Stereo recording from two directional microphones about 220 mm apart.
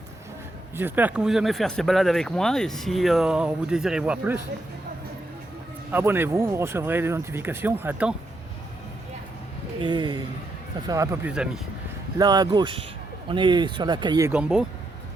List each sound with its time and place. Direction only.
0.8 s speech: 10° right (ahead or behind)
5.9 s speech: 10° right (ahead or behind)
9.8 s speech: 20° right (ahead or behind); by 11.6 s 5° right (ahead or behind)
12.1 s speech: 20° right (ahead or behind)